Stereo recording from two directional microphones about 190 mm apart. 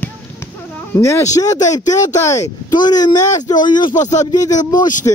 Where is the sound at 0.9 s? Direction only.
15° left (ahead or behind).